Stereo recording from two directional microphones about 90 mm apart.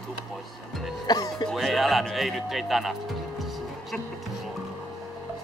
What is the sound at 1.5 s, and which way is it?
Speech, centre (ahead or behind).